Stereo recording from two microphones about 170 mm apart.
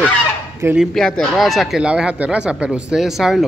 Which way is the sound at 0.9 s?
5° left (ahead or behind).